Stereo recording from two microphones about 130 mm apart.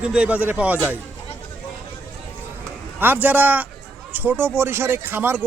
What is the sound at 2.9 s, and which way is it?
A man's voice, 15° right (ahead or behind).